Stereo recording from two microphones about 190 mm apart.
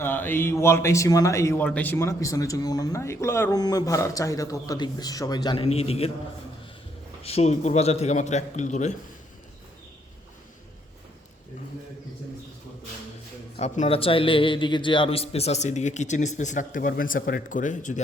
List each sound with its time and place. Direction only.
0.0 s a man's voice: 10° left (ahead or behind); by 6.1 s 30° left (ahead or behind)
7.2 s a man's voice: 35° left (ahead or behind)
13.6 s a man's voice: 35° left (ahead or behind)